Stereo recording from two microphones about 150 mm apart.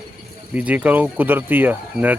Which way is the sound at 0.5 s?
10° right (ahead or behind).